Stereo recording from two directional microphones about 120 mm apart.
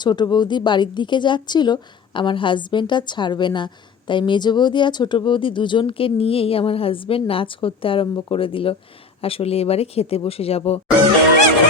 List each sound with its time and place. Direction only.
0.0 s a woman's voice: 35° left (ahead or behind); by 10.8 s 55° left (ahead or behind)